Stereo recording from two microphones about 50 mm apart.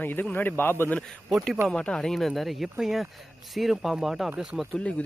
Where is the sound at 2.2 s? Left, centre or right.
Centre.